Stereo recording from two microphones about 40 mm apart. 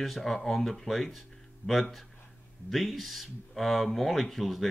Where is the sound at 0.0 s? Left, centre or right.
Centre.